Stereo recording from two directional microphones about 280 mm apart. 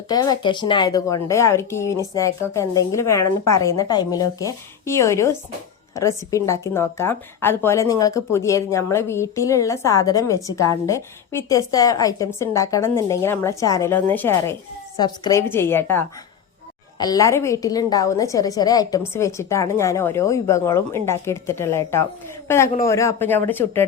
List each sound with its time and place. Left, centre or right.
0.1 s a man's voice: centre